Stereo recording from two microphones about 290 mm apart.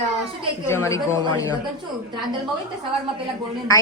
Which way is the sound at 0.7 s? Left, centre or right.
Centre.